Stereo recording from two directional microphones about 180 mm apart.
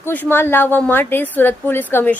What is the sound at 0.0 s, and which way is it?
A woman's voice, 10° left (ahead or behind).